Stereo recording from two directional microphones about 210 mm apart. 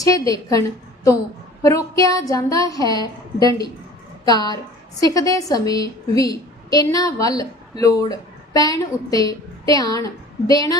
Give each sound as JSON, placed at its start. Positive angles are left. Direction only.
{"t": 0.0, "sound": "a woman's voice", "side_deg": 15}
{"t": 1.6, "sound": "a woman's voice", "side_deg": 15}